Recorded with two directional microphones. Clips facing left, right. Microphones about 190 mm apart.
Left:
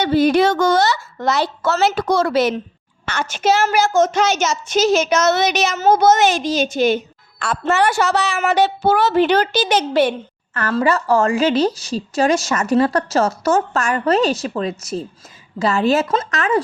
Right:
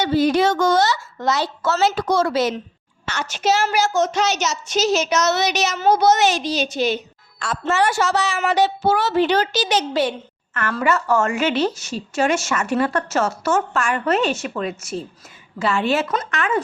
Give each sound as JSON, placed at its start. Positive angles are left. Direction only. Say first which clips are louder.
{"t": 0.0, "sound": "a woman's voice", "louder": "left 3 dB", "side_deg": 60}
{"t": 10.5, "sound": "a woman's voice", "louder": "left 3 dB", "side_deg": 30}